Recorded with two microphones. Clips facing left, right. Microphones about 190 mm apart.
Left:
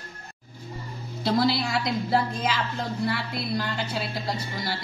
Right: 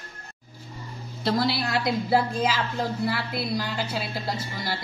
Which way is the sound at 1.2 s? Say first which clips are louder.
Left 1 dB; centre (ahead or behind).